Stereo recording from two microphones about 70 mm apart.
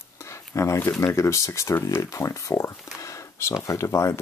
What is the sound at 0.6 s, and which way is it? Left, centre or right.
Speech, left.